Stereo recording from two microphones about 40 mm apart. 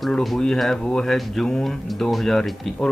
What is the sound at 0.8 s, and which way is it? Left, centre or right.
Speech, centre.